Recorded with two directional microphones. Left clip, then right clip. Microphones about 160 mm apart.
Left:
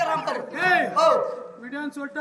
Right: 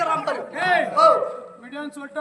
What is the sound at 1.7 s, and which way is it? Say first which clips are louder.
Speech: left 1 dB; 30° left (ahead or behind).